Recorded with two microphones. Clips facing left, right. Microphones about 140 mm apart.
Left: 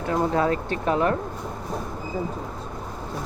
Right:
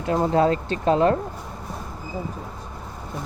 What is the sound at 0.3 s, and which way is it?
Speech, 30° right (ahead or behind).